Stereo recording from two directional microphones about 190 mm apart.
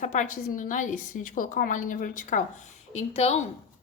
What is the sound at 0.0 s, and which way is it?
A woman's voice, 40° left (ahead or behind).